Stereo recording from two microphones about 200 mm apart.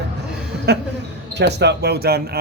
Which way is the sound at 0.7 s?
55° right (ahead or behind).